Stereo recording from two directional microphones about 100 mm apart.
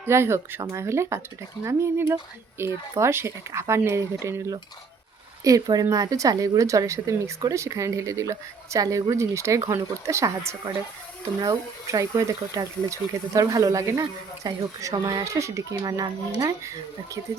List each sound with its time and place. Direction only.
0.0 s speech: 25° right (ahead or behind)
15.8 s speech: 40° right (ahead or behind)